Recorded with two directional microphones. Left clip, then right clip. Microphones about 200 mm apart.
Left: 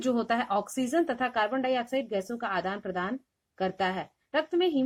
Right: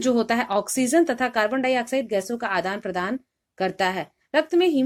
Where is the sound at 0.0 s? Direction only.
35° right (ahead or behind).